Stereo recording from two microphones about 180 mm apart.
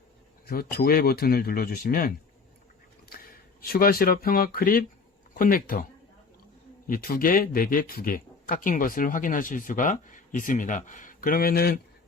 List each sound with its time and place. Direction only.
0.4 s speech: 55° left (ahead or behind)
3.6 s speech: 55° left (ahead or behind)
6.8 s speech: 55° left (ahead or behind)